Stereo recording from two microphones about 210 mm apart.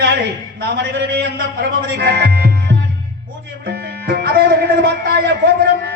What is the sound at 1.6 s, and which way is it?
Music, 50° right (ahead or behind).